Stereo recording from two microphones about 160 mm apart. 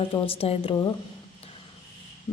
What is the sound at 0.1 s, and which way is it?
Mantra, 35° left (ahead or behind).